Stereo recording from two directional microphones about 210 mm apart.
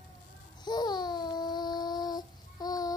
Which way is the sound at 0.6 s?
20° left (ahead or behind).